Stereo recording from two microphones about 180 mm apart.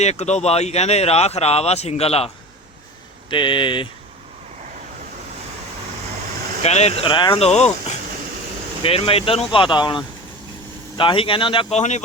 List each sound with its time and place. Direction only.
0.0 s speech: 40° left (ahead or behind)
6.6 s speech: 35° left (ahead or behind)
8.8 s speech: 30° left (ahead or behind)